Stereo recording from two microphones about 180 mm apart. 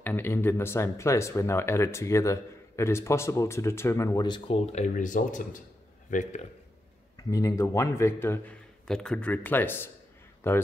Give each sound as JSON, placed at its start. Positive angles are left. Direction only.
{"t": 0.0, "sound": "a man's voice", "side_deg": 10}
{"t": 7.2, "sound": "speech", "side_deg": 20}